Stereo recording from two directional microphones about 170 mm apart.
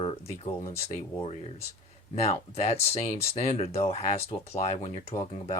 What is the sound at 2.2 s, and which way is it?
Speech, 40° left (ahead or behind).